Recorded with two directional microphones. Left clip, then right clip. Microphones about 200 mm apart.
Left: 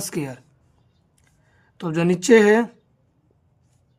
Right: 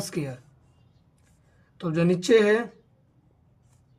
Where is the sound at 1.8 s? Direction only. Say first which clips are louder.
Left 3 dB; 50° left (ahead or behind).